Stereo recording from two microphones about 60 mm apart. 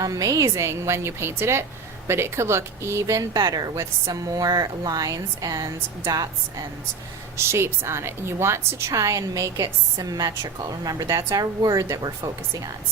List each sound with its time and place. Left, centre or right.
0.0 s a woman's voice: right
7.3 s a woman's voice: right
8.9 s a woman's voice: right